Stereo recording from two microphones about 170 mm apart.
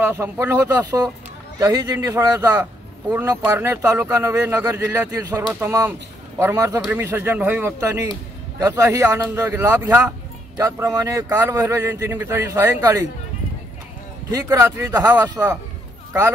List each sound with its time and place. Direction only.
0.0 s a man's voice: 15° right (ahead or behind)
14.3 s a man's voice: 15° right (ahead or behind)